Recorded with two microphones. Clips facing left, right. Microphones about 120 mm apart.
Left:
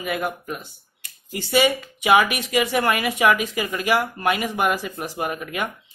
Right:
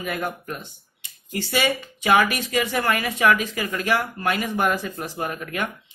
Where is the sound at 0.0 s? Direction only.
5° left (ahead or behind).